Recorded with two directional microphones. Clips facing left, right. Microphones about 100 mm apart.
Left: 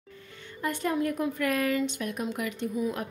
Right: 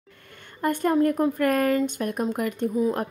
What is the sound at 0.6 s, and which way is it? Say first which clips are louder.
A woman's voice: right 7 dB; 45° right (ahead or behind).